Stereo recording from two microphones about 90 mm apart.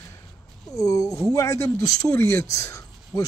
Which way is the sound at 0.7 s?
40° left (ahead or behind).